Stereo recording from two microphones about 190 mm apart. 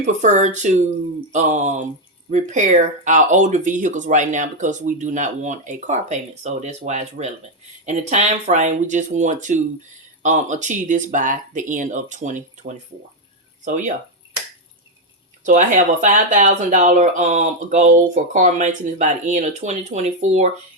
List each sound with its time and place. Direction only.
0.0 s speech: 40° right (ahead or behind)
15.4 s speech: 40° right (ahead or behind)